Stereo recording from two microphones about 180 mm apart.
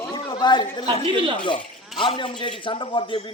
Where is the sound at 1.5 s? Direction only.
30° left (ahead or behind).